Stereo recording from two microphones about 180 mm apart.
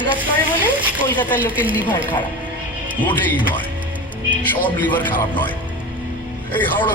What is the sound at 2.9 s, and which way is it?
Speech, 10° left (ahead or behind).